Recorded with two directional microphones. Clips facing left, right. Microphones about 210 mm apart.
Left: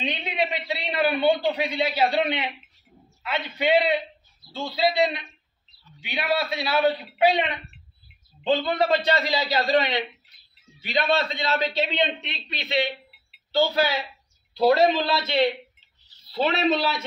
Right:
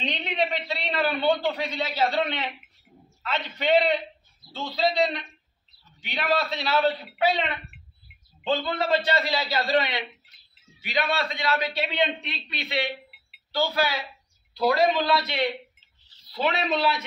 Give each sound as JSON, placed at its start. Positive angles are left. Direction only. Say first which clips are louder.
{"t": 0.0, "sound": "a man's voice", "louder": "even", "side_deg": 10}